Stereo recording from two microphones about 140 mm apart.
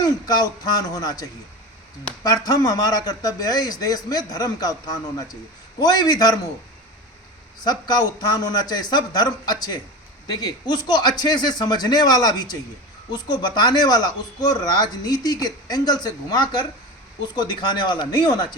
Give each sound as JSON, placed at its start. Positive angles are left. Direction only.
{"t": 0.0, "sound": "speech", "side_deg": 30}
{"t": 2.2, "sound": "speech", "side_deg": 25}
{"t": 5.8, "sound": "speech", "side_deg": 30}
{"t": 7.6, "sound": "speech", "side_deg": 30}